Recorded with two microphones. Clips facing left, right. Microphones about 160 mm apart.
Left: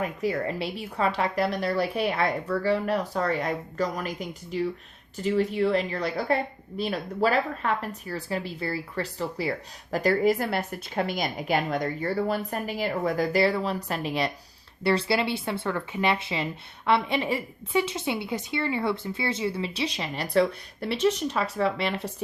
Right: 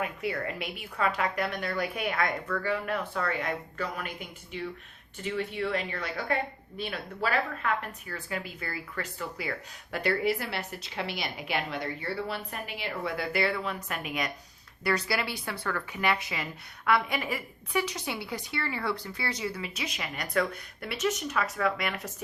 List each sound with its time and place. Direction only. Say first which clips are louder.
0.0 s a woman's voice: left 5 dB; 35° left (ahead or behind)